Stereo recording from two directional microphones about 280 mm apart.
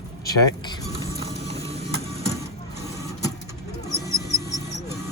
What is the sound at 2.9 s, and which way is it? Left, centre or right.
Vehicle, centre.